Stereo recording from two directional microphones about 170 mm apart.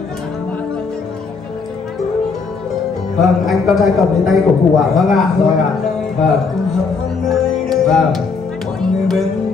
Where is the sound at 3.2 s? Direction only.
Centre (ahead or behind).